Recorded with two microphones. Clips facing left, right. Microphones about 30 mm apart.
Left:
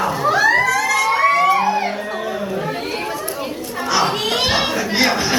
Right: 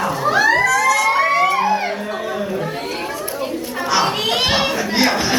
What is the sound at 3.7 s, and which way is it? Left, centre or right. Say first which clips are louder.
Children playing: even; centre.